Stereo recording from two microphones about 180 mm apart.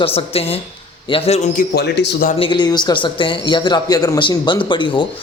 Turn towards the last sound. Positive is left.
turn(degrees=25)  # may be behind; listen again after turning